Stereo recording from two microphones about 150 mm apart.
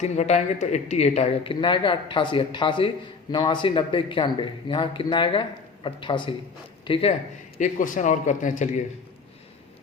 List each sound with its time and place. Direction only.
0.0 s speech: 50° left (ahead or behind)
1.6 s speech: 35° left (ahead or behind)
7.6 s a man's voice: 60° left (ahead or behind)